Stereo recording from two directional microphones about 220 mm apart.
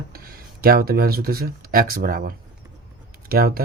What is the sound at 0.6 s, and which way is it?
Speech, 45° right (ahead or behind).